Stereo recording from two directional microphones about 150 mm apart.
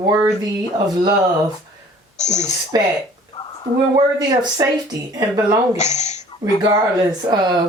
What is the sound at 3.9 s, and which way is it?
Speech, 25° right (ahead or behind).